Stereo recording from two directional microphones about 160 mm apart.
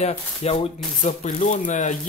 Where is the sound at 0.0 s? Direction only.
40° left (ahead or behind).